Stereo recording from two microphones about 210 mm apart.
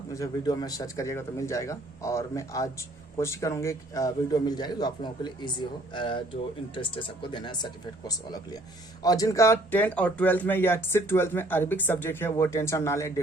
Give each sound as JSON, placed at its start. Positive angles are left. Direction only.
{"t": 0.1, "sound": "speech", "side_deg": 15}